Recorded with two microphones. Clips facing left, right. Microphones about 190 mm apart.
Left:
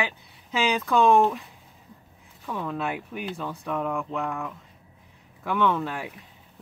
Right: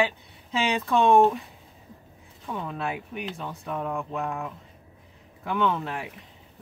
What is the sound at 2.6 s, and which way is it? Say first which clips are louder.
Speech: left 3 dB; 25° right (ahead or behind).